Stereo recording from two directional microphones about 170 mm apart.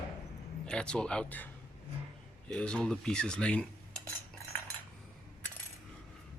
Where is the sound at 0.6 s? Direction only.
5° left (ahead or behind).